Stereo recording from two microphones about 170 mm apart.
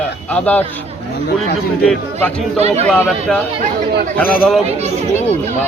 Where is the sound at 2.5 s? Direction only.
40° right (ahead or behind).